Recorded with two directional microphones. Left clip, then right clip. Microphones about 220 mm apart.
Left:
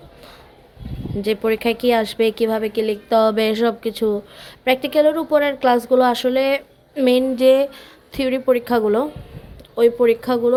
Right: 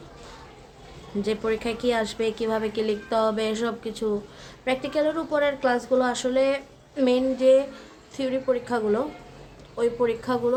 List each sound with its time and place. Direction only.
1.2 s a woman's voice: 30° left (ahead or behind)